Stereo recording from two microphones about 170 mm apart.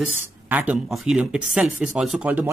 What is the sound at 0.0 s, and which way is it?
Speech, 10° right (ahead or behind).